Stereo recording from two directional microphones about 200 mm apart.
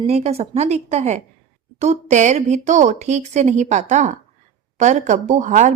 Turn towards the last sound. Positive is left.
turn(degrees=-40)  # may be behind; listen again after turning